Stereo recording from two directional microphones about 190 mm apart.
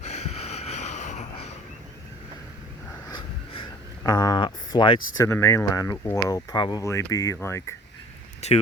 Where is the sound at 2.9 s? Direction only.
20° left (ahead or behind).